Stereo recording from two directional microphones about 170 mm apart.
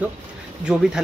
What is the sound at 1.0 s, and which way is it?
Speech, centre (ahead or behind).